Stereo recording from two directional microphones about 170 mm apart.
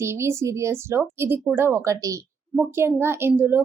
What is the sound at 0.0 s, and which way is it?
A woman's voice, 15° right (ahead or behind).